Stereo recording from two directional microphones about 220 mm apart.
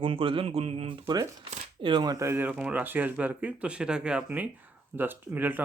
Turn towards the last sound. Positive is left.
turn(degrees=-10)  # may be behind; listen again after turning